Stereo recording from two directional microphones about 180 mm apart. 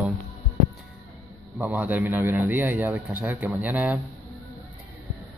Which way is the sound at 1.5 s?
10° right (ahead or behind).